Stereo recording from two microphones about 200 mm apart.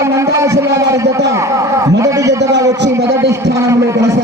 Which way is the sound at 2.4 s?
15° right (ahead or behind).